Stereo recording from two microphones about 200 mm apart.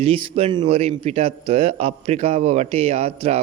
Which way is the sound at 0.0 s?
30° right (ahead or behind).